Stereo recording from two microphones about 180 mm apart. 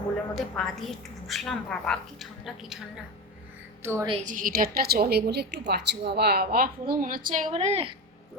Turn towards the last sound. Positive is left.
turn(degrees=-35)  # may be behind; listen again after turning